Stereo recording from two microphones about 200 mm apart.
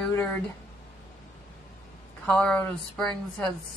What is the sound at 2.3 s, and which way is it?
Speech, 10° left (ahead or behind).